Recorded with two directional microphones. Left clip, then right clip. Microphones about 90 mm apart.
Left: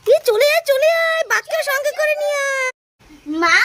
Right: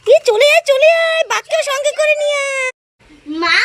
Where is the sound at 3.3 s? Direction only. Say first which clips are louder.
Right 1 dB; 40° left (ahead or behind).